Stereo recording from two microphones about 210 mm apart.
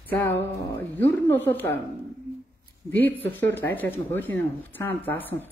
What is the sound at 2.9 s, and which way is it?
Speech, 10° left (ahead or behind).